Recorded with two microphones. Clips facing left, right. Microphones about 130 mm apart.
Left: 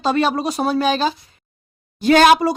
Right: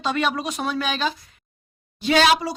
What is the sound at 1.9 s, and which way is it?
Speech, 45° left (ahead or behind).